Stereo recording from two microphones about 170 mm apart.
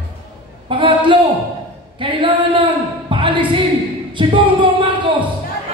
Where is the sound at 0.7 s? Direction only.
30° right (ahead or behind).